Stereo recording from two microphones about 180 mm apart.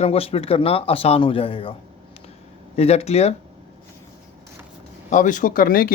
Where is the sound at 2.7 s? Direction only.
35° left (ahead or behind).